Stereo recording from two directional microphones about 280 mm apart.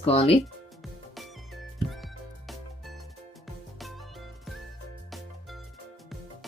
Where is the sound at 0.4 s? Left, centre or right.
Centre.